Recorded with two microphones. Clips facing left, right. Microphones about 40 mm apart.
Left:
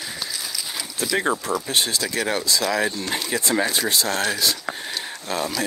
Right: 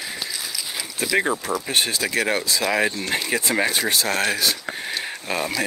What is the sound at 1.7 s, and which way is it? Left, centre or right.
Speech, right.